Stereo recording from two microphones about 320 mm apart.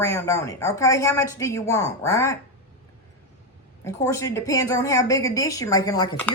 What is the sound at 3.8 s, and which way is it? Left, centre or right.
Speech, centre.